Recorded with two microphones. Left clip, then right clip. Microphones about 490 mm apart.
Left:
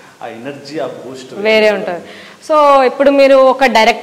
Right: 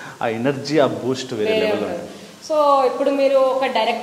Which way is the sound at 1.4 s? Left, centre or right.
Left.